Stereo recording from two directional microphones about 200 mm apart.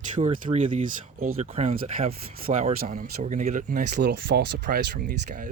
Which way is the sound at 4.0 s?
55° right (ahead or behind).